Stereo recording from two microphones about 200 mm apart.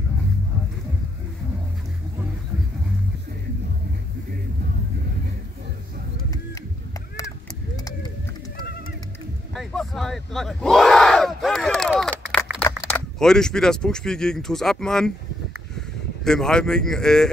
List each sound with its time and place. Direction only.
8.5 s music: 50° left (ahead or behind)
9.5 s a sound: centre (ahead or behind)
12.8 s speech: 5° left (ahead or behind)
16.3 s speech: 5° left (ahead or behind)